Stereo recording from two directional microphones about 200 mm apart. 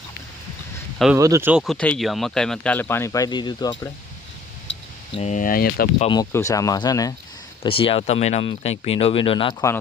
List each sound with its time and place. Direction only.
1.1 s speech: 15° right (ahead or behind); by 3.9 s 20° left (ahead or behind)
4.7 s a sound: 65° left (ahead or behind)
5.1 s speech: 35° left (ahead or behind)
6.0 s speech: 25° left (ahead or behind)